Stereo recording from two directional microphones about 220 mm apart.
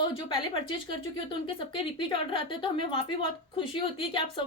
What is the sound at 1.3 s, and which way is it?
A woman's voice, 25° left (ahead or behind).